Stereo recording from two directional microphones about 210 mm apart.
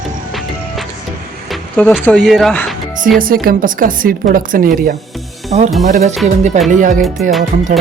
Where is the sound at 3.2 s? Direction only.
45° right (ahead or behind).